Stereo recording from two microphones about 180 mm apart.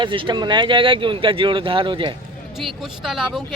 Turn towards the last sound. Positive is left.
turn(degrees=0)  # may be behind; listen again after turning